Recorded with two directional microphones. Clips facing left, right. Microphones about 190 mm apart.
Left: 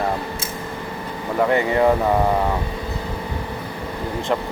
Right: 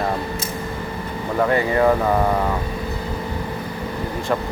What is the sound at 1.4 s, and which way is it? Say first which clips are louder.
Speech: even; 20° left (ahead or behind).